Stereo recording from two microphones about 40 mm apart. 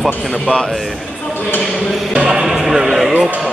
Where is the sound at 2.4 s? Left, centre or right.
Centre.